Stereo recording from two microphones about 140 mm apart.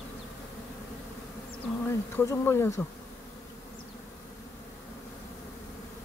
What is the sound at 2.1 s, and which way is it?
Speech, 20° left (ahead or behind).